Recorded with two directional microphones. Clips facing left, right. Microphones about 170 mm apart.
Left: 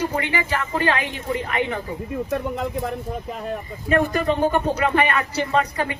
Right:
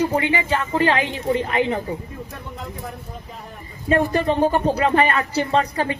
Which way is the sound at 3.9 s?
30° right (ahead or behind).